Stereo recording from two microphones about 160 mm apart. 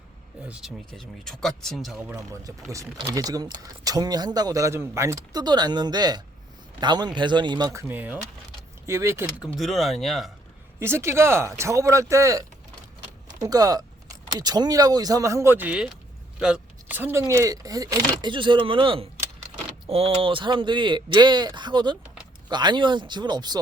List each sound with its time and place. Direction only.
0.4 s speech: 5° right (ahead or behind)
2.0 s speech: 20° right (ahead or behind)
9.6 s speech: centre (ahead or behind)
10.8 s speech: 15° right (ahead or behind)